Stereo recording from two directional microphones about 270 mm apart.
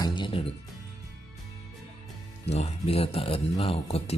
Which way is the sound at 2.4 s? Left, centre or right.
Left.